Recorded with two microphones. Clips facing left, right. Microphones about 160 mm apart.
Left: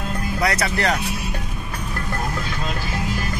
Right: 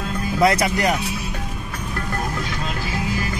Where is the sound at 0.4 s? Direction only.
20° right (ahead or behind).